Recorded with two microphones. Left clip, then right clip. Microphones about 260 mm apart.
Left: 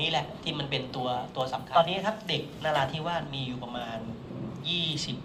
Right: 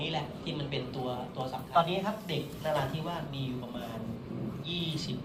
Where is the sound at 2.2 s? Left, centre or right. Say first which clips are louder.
Left 4 dB; left.